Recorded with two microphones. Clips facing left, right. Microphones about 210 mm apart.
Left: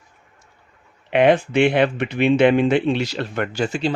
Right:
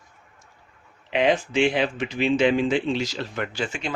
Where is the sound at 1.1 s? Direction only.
60° left (ahead or behind).